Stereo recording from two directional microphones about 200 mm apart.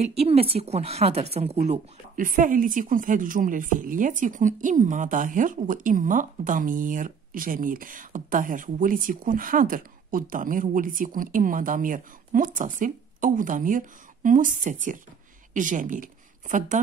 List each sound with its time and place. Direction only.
0.0 s a woman's voice: 30° right (ahead or behind)